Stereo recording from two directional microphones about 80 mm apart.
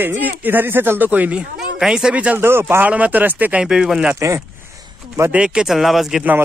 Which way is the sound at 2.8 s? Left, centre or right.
Centre.